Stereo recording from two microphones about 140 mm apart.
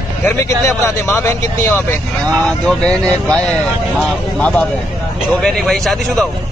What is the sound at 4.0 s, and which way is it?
Speech, 10° left (ahead or behind).